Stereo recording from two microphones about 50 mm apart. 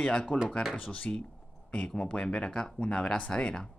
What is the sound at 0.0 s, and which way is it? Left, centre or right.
Speech, centre.